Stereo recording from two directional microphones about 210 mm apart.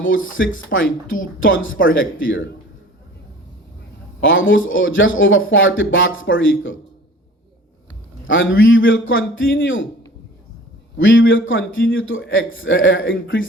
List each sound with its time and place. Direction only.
0.3 s a man's voice: 70° left (ahead or behind)
4.2 s speech: 65° left (ahead or behind)
8.3 s a man's voice: 65° left (ahead or behind)
10.9 s a man's voice: 65° left (ahead or behind)